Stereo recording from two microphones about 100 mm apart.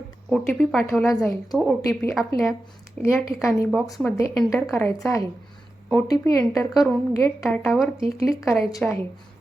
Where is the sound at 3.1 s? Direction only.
30° left (ahead or behind).